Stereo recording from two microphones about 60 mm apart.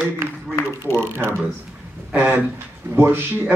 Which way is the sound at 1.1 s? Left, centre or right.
Right.